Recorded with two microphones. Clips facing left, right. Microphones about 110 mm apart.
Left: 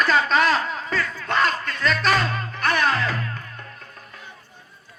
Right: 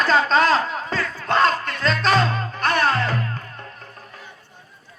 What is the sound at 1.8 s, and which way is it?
Music, 30° right (ahead or behind).